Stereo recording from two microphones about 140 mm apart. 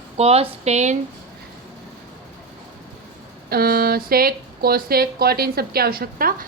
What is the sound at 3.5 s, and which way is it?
Speech, 90° right.